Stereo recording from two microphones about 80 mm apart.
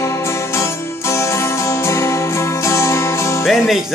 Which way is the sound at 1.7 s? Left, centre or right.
Left.